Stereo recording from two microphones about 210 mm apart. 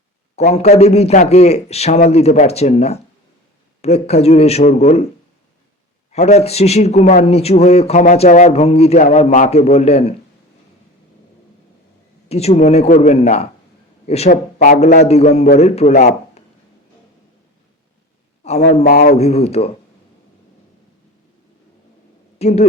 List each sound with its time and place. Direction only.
0.5 s a man's voice: 30° left (ahead or behind)
6.1 s a man's voice: 30° left (ahead or behind)
12.3 s a man's voice: 30° left (ahead or behind)
18.4 s a man's voice: 30° left (ahead or behind)
18.8 s speech: 45° left (ahead or behind)
19.1 s speech: 30° left (ahead or behind)
22.4 s a woman's voice: 30° left (ahead or behind)